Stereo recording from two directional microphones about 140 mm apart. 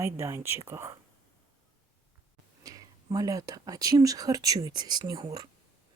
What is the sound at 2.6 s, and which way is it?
Speech, 25° right (ahead or behind).